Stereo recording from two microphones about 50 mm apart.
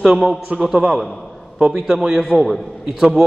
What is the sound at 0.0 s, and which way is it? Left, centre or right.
A man's voice, centre.